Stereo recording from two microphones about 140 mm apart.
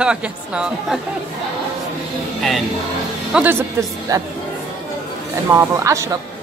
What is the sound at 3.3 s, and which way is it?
Speech, 10° right (ahead or behind).